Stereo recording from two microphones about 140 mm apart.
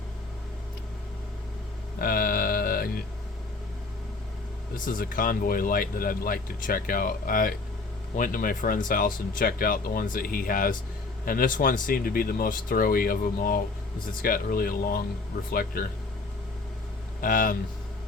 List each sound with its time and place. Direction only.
2.0 s music: 90° left
4.9 s speech: 80° left
8.1 s speech: 75° left (ahead or behind)
17.2 s speech: 80° left